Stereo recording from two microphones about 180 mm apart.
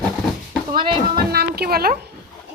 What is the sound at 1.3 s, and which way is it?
Speech, 60° right (ahead or behind).